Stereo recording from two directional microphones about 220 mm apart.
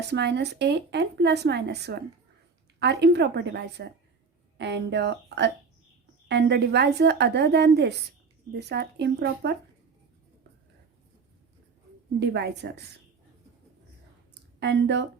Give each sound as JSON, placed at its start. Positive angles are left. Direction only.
{"t": 0.1, "sound": "speech", "side_deg": -50}
{"t": 12.2, "sound": "speech", "side_deg": -50}
{"t": 14.6, "sound": "speech", "side_deg": -50}